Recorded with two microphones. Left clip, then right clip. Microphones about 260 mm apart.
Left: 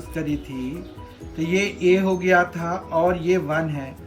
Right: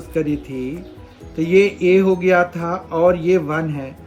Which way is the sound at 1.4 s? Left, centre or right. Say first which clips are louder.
Right 8 dB; centre.